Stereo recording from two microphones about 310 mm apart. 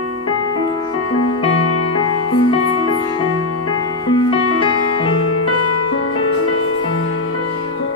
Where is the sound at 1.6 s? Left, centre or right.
Left.